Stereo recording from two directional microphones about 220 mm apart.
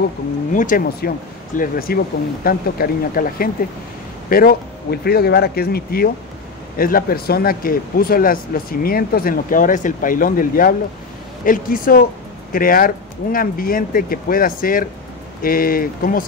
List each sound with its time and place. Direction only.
0.5 s speech: 35° left (ahead or behind)